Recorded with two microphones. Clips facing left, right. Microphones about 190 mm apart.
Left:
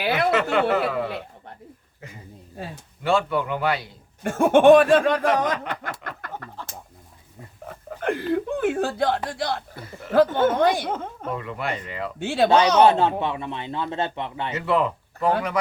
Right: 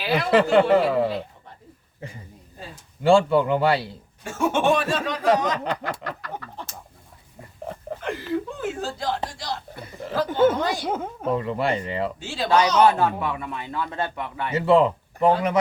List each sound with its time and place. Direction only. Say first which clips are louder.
0.0 s a sound: left 1 dB; 60° left (ahead or behind)
0.5 s speech: right 4 dB; 30° right (ahead or behind)
3.0 s speech: right 5 dB; 30° right (ahead or behind)
4.2 s speech: left 7 dB; 55° left (ahead or behind)
8.0 s speech: left 4 dB; 55° left (ahead or behind)
9.7 s speech: right 3 dB; 20° right (ahead or behind)
10.5 s speech: left 5 dB; 55° left (ahead or behind)
10.8 s speech: right 2 dB; 10° right (ahead or behind)
11.3 s speech: right 6 dB; 30° right (ahead or behind)
12.2 s speech: left 9 dB; 60° left (ahead or behind)
12.5 s a man's voice: left 1 dB; 25° left (ahead or behind)
14.5 s speech: right 6 dB; 30° right (ahead or behind)